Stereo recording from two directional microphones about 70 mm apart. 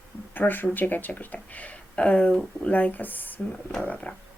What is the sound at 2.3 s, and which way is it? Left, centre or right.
Speech, centre.